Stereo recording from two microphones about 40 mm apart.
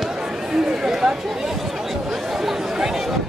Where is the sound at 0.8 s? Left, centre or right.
Centre.